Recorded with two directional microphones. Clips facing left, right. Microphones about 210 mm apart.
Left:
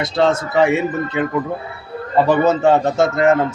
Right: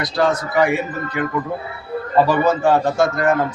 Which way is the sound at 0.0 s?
25° left (ahead or behind).